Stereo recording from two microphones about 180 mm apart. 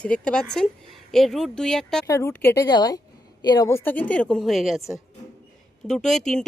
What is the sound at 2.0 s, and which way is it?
Speech, 15° left (ahead or behind).